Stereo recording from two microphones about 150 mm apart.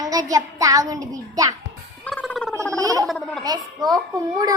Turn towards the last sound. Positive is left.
turn(degrees=-25)  # may be behind; listen again after turning